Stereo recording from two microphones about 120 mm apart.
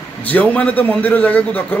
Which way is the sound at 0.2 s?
10° left (ahead or behind).